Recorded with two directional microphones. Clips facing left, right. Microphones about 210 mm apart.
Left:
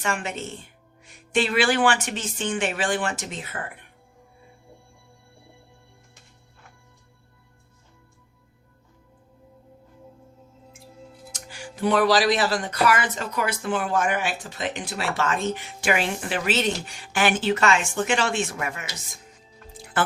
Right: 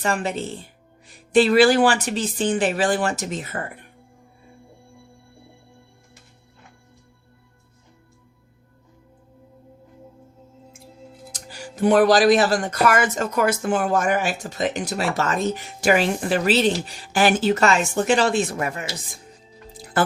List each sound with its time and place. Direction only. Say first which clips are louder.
0.0 s speech: right 5 dB; 35° right (ahead or behind)
11.3 s speech: right 2 dB; 35° right (ahead or behind)
19.7 s music: right 4 dB; 40° right (ahead or behind)